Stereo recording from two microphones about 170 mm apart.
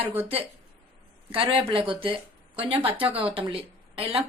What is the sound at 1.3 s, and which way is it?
Speech, 30° right (ahead or behind).